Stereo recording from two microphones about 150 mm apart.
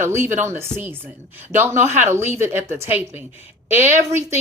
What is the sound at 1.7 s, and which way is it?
Speech, 50° right (ahead or behind).